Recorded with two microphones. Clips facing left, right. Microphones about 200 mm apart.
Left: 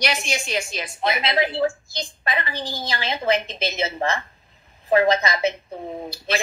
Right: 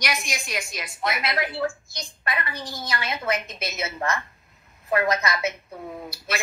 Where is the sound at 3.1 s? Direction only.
30° left (ahead or behind).